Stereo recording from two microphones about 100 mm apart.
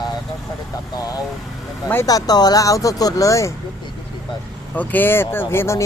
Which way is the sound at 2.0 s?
40° left (ahead or behind).